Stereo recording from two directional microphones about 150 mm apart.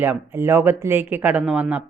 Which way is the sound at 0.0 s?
15° right (ahead or behind).